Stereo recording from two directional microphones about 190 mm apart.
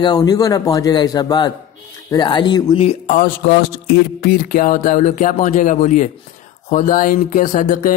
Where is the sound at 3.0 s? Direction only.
45° left (ahead or behind).